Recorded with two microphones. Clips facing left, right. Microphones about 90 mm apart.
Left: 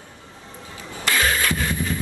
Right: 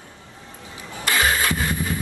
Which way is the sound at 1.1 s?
15° right (ahead or behind).